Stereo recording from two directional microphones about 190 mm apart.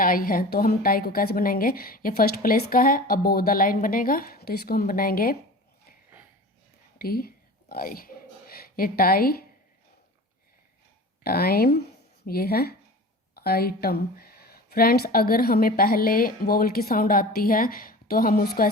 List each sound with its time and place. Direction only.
0.0 s a woman's voice: 50° left (ahead or behind)
7.0 s a sound: 50° left (ahead or behind)
11.2 s a woman's voice: 55° left (ahead or behind)